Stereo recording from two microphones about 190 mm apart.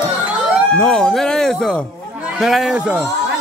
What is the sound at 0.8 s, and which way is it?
A man's voice, 5° left (ahead or behind).